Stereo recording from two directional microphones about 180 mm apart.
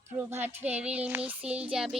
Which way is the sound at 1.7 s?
5° right (ahead or behind).